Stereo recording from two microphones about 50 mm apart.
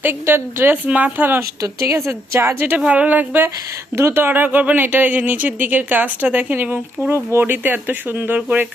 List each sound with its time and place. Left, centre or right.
0.0 s speech: right
0.9 s speech: right
1.4 s speech: right
2.6 s a woman's voice: right
2.8 s a woman's voice: right
3.9 s speech: right
4.2 s a woman's voice: right
7.1 s speech: right